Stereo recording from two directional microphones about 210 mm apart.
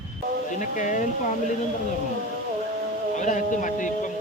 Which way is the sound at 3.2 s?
35° left (ahead or behind).